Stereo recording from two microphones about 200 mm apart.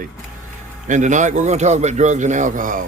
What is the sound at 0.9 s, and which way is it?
A man's voice, 40° right (ahead or behind).